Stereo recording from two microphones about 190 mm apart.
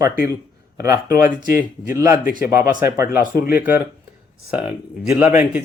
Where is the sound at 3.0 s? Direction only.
50° left (ahead or behind).